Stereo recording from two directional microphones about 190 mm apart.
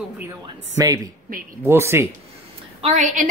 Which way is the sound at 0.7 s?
20° right (ahead or behind).